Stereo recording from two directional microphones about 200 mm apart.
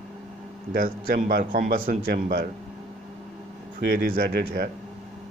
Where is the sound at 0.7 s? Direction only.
45° right (ahead or behind).